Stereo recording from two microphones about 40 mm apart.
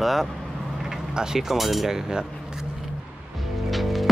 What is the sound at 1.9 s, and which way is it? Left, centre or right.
Cutlery, centre.